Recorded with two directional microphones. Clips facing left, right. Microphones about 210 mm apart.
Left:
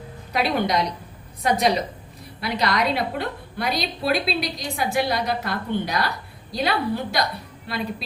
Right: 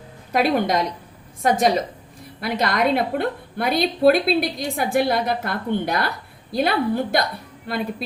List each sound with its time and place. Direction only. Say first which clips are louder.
0.3 s a woman's voice: right 3 dB; 50° right (ahead or behind)